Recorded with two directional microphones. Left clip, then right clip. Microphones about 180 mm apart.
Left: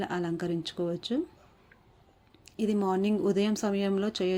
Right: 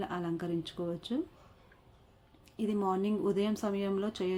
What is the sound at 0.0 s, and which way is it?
Speech, 20° left (ahead or behind).